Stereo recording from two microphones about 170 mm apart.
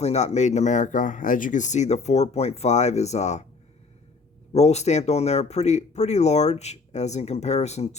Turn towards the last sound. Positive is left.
turn(degrees=40)  # may be behind; listen again after turning